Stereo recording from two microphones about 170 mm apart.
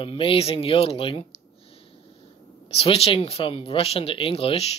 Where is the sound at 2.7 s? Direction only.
35° left (ahead or behind).